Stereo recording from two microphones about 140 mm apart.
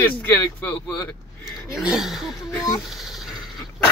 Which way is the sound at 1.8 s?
5° right (ahead or behind).